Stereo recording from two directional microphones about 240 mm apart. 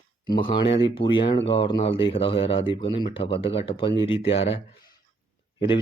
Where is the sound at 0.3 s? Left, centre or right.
Centre.